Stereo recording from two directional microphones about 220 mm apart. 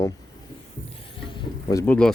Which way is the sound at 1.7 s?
5° left (ahead or behind).